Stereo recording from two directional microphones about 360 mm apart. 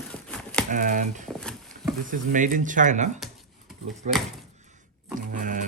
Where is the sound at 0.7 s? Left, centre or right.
Right.